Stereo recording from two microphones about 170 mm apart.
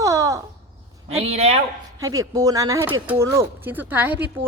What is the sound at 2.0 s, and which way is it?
Speech, 20° right (ahead or behind).